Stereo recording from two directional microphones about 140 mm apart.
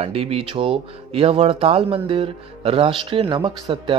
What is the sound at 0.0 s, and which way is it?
Speech, 45° right (ahead or behind).